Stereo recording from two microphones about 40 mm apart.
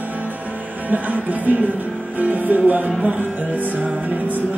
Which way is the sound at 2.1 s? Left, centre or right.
Right.